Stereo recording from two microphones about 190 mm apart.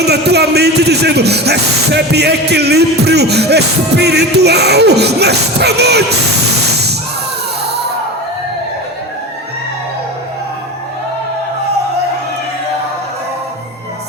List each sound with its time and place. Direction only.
0.0 s speech: 60° right (ahead or behind)
7.7 s music: 60° right (ahead or behind)